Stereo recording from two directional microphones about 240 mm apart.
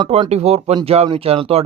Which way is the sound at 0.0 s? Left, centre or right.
Right.